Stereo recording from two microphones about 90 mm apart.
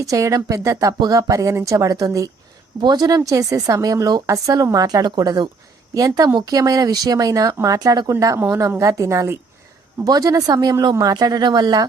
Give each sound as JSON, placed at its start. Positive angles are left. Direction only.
{"t": 0.0, "sound": "a woman's voice", "side_deg": -35}
{"t": 3.2, "sound": "a woman's voice", "side_deg": -40}
{"t": 10.0, "sound": "speech", "side_deg": -45}